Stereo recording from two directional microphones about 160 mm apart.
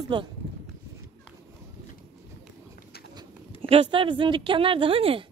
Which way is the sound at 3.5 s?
35° right (ahead or behind).